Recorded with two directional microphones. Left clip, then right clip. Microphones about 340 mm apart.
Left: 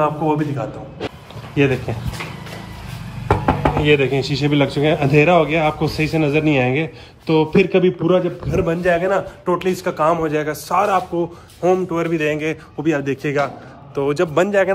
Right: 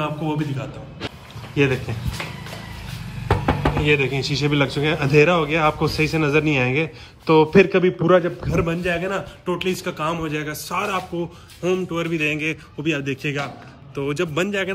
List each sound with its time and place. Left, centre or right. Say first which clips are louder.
0.0 s a man's voice: left 7 dB; centre
3.4 s knock: left 4 dB; centre
4.2 s a man's voice: left 3 dB; centre
7.5 s a man's voice: even; centre